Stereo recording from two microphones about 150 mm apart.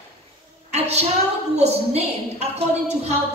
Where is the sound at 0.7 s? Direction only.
45° right (ahead or behind).